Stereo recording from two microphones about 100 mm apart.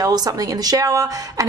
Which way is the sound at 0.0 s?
40° right (ahead or behind).